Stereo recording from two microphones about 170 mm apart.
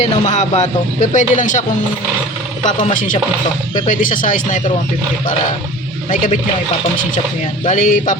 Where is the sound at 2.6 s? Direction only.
50° left (ahead or behind).